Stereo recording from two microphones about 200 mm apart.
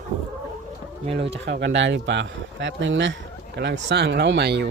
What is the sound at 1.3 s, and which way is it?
Speech, 60° right (ahead or behind).